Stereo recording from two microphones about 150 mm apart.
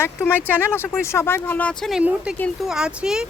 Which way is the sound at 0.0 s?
15° left (ahead or behind).